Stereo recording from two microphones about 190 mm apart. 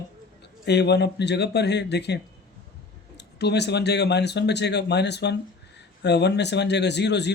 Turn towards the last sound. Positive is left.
turn(degrees=65)  # may be behind; listen again after turning